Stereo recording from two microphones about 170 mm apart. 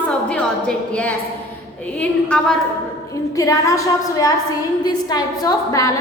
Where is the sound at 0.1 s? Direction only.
5° left (ahead or behind).